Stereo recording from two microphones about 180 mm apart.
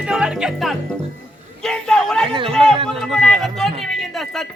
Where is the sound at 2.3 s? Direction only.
30° right (ahead or behind).